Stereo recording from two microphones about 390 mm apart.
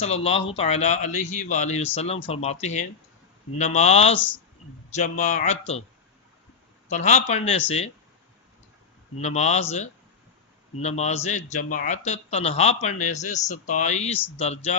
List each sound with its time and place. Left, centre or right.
0.0 s a man's voice: centre
6.8 s a man's voice: centre
9.2 s a man's voice: centre